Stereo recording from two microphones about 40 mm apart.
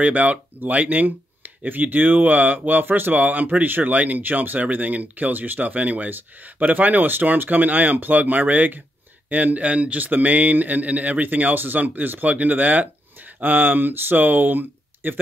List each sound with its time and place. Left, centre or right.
0.0 s speech: right